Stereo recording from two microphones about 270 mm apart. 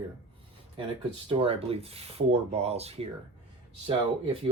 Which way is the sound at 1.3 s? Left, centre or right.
Right.